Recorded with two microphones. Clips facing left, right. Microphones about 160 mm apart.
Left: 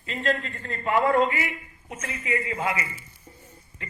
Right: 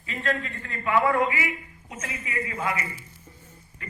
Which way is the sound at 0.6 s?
30° left (ahead or behind).